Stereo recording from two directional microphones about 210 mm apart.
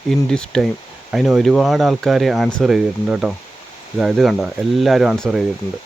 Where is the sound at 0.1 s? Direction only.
5° left (ahead or behind).